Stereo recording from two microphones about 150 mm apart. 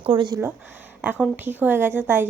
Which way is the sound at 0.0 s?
30° right (ahead or behind).